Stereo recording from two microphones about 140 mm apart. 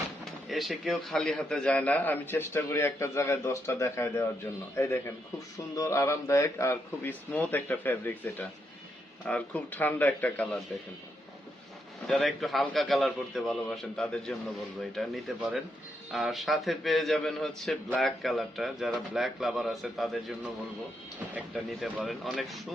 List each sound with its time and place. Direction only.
0.4 s a man's voice: centre (ahead or behind)
12.0 s a man's voice: centre (ahead or behind)